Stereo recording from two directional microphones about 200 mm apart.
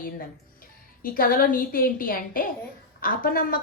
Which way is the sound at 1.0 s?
45° left (ahead or behind).